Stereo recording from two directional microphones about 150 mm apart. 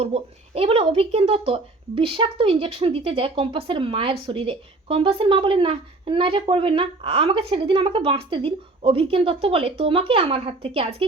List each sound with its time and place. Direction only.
0.0 s speech: 45° right (ahead or behind)